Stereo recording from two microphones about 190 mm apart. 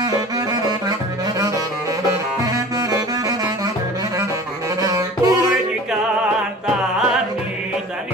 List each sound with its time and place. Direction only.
0.0 s saxophone: 20° right (ahead or behind)
2.5 s saxophone: 20° right (ahead or behind)
4.8 s music: 20° right (ahead or behind)